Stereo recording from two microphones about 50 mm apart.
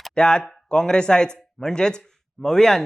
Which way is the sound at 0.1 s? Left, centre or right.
Centre.